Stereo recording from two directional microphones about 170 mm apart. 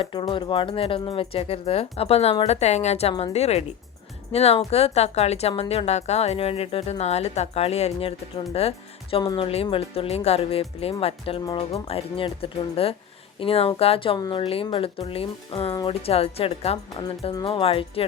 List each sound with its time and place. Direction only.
0.0 s a woman's voice: 30° left (ahead or behind)